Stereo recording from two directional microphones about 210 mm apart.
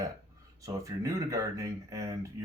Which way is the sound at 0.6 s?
15° right (ahead or behind).